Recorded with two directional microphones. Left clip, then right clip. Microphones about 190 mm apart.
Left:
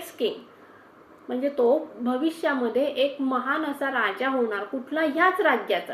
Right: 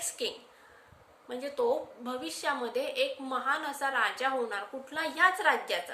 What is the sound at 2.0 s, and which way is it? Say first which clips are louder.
A woman's voice: left 5 dB; 45° right (ahead or behind).